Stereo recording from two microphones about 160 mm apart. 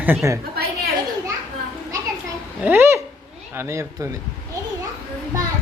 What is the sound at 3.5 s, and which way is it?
Speech, 15° right (ahead or behind).